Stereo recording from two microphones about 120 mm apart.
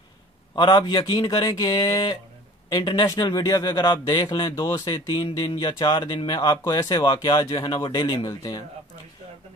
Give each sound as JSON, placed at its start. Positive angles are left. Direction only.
{"t": 0.6, "sound": "speech", "side_deg": 35}